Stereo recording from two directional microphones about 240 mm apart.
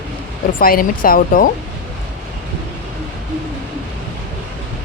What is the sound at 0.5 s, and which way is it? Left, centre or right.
Speech, left.